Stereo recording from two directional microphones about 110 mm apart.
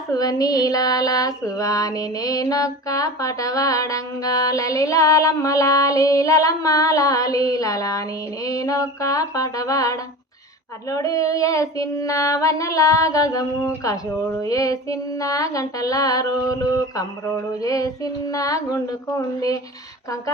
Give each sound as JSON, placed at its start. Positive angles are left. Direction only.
{"t": 0.1, "sound": "female singing", "side_deg": 35}